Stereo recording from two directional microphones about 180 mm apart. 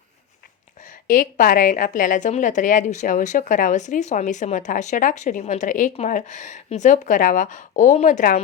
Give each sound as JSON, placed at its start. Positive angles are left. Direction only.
{"t": 1.0, "sound": "a woman's voice", "side_deg": 50}